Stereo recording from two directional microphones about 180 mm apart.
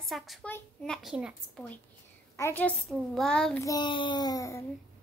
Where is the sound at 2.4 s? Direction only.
10° left (ahead or behind).